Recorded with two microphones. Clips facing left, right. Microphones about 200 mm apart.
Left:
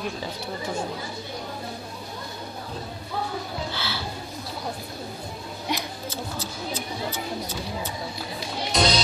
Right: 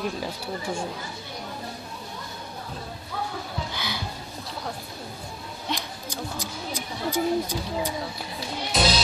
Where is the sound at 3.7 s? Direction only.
15° right (ahead or behind).